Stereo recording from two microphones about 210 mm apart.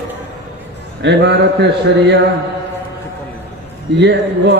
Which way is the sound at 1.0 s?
55° right (ahead or behind).